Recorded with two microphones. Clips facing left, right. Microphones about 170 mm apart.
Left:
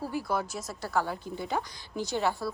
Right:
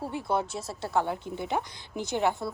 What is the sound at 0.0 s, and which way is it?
Speech, 25° right (ahead or behind).